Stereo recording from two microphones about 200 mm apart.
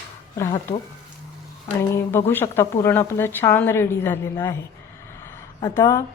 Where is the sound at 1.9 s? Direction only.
15° left (ahead or behind).